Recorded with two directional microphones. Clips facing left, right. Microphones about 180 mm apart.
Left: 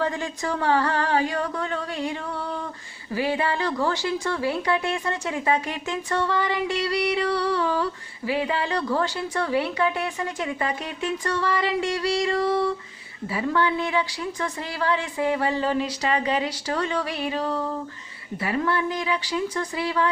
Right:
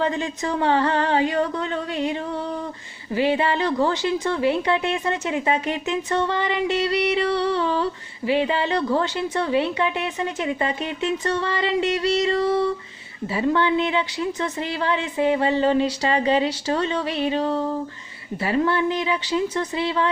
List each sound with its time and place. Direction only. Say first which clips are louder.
0.0 s speech: right 3 dB; 20° right (ahead or behind)
3.2 s speech: right 4 dB; 25° right (ahead or behind)